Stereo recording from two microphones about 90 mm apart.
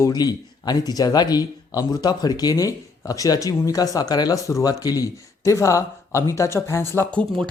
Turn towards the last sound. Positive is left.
turn(degrees=10)  # may be behind; listen again after turning